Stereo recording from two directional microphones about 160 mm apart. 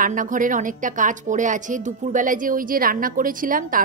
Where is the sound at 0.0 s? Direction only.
55° right (ahead or behind).